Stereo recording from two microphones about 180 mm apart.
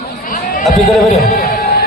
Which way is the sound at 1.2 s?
60° left (ahead or behind).